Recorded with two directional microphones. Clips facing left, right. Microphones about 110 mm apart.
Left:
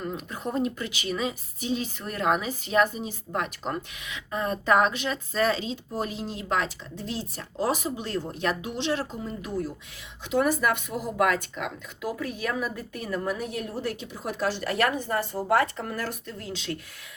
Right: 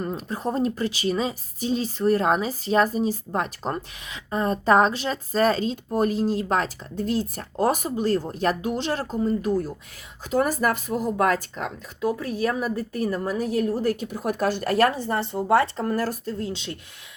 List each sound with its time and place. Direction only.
0.0 s a woman's voice: 35° right (ahead or behind)